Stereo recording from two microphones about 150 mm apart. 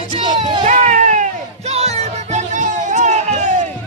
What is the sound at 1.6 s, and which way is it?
Music, 45° right (ahead or behind).